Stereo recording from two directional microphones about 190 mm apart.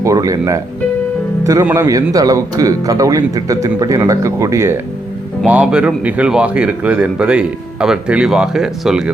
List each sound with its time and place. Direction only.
0.0 s a man's voice: 15° right (ahead or behind)